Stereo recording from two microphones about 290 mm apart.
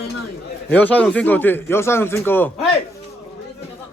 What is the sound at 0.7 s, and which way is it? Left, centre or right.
Speech, centre.